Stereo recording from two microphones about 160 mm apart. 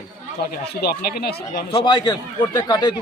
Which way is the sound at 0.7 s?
80° left.